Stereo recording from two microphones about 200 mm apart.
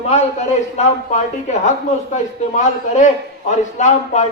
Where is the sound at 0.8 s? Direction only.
35° left (ahead or behind).